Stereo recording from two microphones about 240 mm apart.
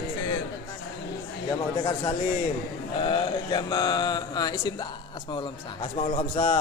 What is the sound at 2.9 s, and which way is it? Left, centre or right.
Speech, centre.